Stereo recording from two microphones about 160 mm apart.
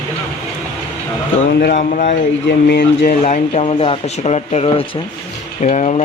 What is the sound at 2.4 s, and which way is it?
Speech, 90° left.